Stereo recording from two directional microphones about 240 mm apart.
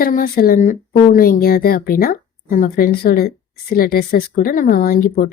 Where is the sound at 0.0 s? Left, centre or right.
Left.